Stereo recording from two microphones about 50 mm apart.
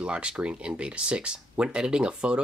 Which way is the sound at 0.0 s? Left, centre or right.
Right.